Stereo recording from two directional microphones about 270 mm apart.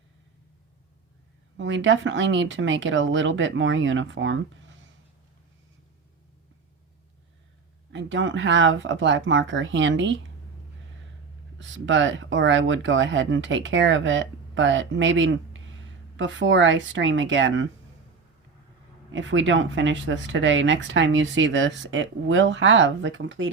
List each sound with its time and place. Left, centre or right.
1.5 s speech: right
7.9 s speech: right
11.6 s speech: right
19.1 s speech: right